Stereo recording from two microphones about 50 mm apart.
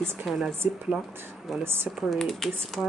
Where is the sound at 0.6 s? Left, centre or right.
Right.